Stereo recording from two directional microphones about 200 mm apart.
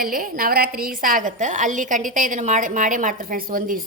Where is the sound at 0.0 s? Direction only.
45° right (ahead or behind).